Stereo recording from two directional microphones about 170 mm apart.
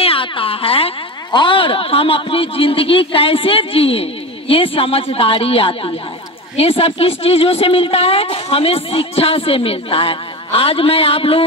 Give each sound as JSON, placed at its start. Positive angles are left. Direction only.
{"t": 0.0, "sound": "speech", "side_deg": 35}